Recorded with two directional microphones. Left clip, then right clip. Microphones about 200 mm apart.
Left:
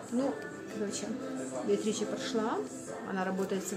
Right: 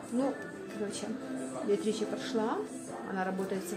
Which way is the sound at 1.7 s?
Centre (ahead or behind).